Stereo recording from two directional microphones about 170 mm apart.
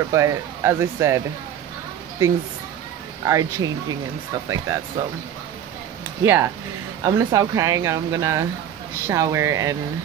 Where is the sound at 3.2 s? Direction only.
20° right (ahead or behind).